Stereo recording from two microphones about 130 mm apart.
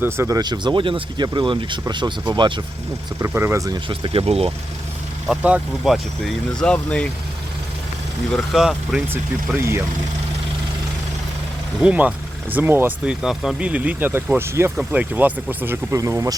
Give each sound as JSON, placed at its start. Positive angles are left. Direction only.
{"t": 0.0, "sound": "speech", "side_deg": -20}
{"t": 3.2, "sound": "speech", "side_deg": -20}
{"t": 3.8, "sound": "speech", "side_deg": -40}
{"t": 5.3, "sound": "speech", "side_deg": -10}
{"t": 8.3, "sound": "speech", "side_deg": -5}
{"t": 9.6, "sound": "speech", "side_deg": -20}
{"t": 11.8, "sound": "speech", "side_deg": -10}
{"t": 13.2, "sound": "speech", "side_deg": -5}